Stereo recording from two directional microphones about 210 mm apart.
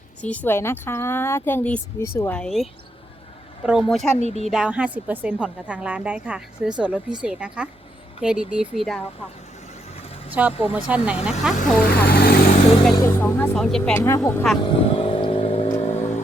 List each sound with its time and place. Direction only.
0.2 s a woman's voice: 5° left (ahead or behind)
4.2 s speech: 30° left (ahead or behind)
4.4 s a woman's voice: 5° right (ahead or behind)
10.2 s a woman's voice: 10° right (ahead or behind)
12.0 s vehicle: 45° left (ahead or behind)
12.9 s a woman's voice: 15° left (ahead or behind)
14.6 s vehicle: 25° left (ahead or behind)